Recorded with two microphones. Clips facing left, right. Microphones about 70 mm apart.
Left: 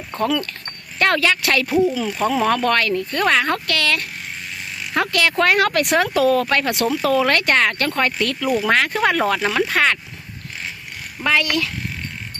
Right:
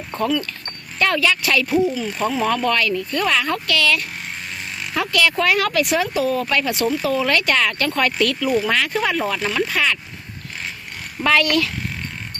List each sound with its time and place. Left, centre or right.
0.9 s speech: left
1.6 s speech: centre
2.2 s speech: left
5.9 s speech: left
6.5 s speech: left
7.0 s speech: left
8.7 s speech: left
9.1 s speech: left
9.6 s speech: left
11.2 s speech: centre